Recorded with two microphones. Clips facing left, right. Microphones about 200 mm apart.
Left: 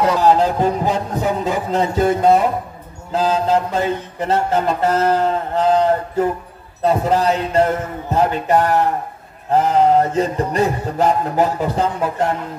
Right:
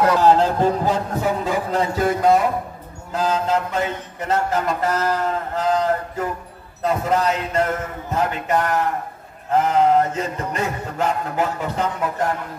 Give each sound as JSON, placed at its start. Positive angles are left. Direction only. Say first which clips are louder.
{"t": 0.1, "sound": "a man's voice", "louder": "left 1 dB", "side_deg": 15}
{"t": 3.1, "sound": "mantra", "louder": "left 4 dB", "side_deg": 30}
{"t": 6.8, "sound": "a sound", "louder": "left 4 dB", "side_deg": 30}